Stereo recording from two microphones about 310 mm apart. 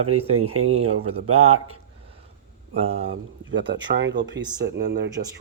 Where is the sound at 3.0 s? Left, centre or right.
Right.